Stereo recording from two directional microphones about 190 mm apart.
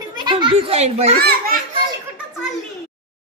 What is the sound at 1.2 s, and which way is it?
Speech, 55° right (ahead or behind).